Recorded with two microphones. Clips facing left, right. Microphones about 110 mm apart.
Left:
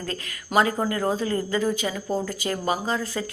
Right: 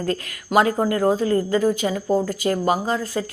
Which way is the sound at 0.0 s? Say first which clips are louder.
Right 8 dB; 45° right (ahead or behind).